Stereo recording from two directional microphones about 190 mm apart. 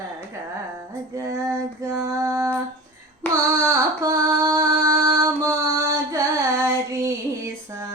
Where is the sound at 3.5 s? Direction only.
15° right (ahead or behind).